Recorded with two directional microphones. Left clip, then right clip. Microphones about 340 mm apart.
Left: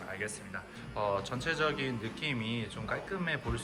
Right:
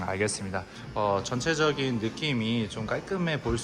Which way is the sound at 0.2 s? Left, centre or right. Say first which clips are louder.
Right 9 dB; centre.